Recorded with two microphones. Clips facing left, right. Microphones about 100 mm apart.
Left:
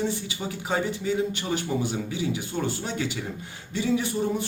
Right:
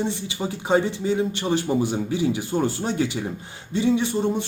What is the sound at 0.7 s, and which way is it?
A man's voice, 30° right (ahead or behind).